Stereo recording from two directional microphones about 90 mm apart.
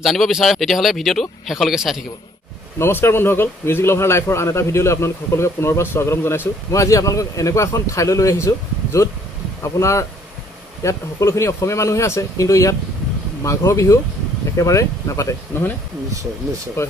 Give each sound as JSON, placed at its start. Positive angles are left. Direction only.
{"t": 0.0, "sound": "speech", "side_deg": 0}
{"t": 2.8, "sound": "a man's voice", "side_deg": 25}
{"t": 6.7, "sound": "a man's voice", "side_deg": 35}
{"t": 16.8, "sound": "a man's voice", "side_deg": 30}